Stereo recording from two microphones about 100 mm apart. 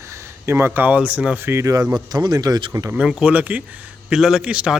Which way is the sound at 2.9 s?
5° right (ahead or behind).